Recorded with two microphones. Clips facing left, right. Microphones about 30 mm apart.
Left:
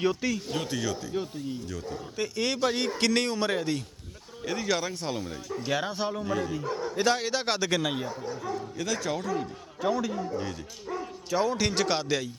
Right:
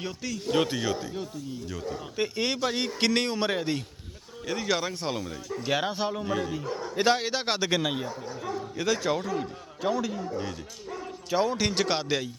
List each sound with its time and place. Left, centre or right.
0.0 s speech: centre
0.7 s a man's voice: centre
1.1 s speech: centre
1.9 s a man's voice: centre
2.6 s a man's voice: centre
5.2 s speech: centre
5.7 s a man's voice: centre
6.9 s a man's voice: centre
8.8 s a man's voice: centre
11.3 s a man's voice: centre